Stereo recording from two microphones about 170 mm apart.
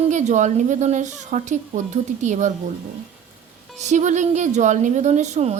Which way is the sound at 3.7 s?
45° right (ahead or behind).